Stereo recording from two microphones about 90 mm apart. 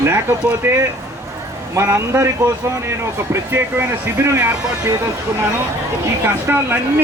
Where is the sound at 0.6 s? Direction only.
25° right (ahead or behind).